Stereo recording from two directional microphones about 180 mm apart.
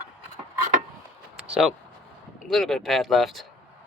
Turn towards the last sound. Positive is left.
turn(degrees=0)  # may be behind; listen again after turning